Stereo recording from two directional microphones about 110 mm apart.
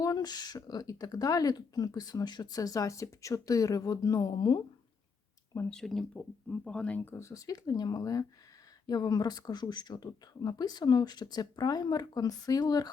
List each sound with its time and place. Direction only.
0.0 s speech: 35° left (ahead or behind)
5.6 s speech: 5° left (ahead or behind); by 12.9 s 35° left (ahead or behind)